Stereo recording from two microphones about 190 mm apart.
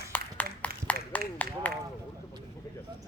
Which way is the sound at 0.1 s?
10° left (ahead or behind).